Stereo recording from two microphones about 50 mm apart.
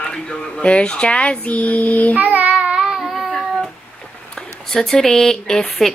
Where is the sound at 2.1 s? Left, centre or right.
Right.